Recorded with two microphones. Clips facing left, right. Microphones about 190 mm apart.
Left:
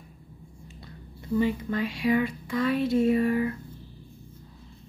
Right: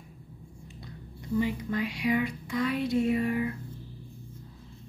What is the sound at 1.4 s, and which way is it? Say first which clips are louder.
Speech: left 3 dB; 20° right (ahead or behind).